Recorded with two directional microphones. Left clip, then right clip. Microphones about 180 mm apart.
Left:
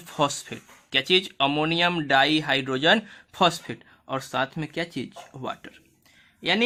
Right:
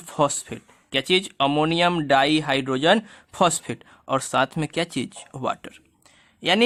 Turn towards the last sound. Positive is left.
turn(degrees=-40)  # may be behind; listen again after turning